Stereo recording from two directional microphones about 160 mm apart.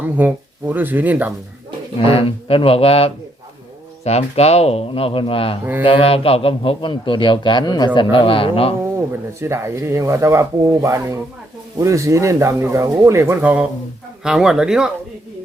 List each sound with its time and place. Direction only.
0.0 s speech: 10° right (ahead or behind)
2.0 s a man's voice: 35° left (ahead or behind)
9.4 s speech: 15° right (ahead or behind)